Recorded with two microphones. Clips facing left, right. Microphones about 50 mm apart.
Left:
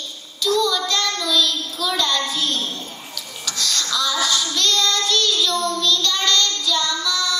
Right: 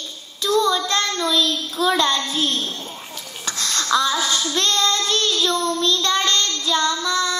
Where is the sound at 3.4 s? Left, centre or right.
Right.